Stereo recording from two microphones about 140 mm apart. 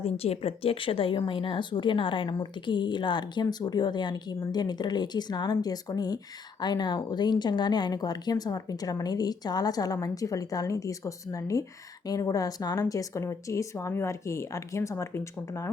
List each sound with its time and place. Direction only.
0.0 s speech: 45° left (ahead or behind); by 15.7 s 20° left (ahead or behind)